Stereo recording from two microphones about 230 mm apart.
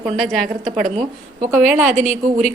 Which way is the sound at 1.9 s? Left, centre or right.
Right.